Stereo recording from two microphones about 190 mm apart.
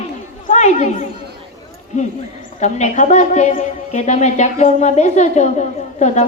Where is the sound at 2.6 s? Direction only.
35° left (ahead or behind).